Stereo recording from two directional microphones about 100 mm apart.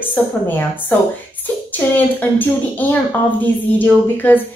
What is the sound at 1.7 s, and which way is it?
A woman's voice, 20° left (ahead or behind).